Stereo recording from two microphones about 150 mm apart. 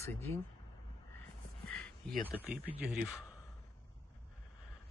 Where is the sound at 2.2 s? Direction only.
10° left (ahead or behind).